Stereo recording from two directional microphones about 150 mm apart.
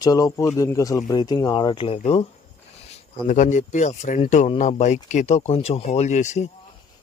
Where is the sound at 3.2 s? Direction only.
55° left (ahead or behind).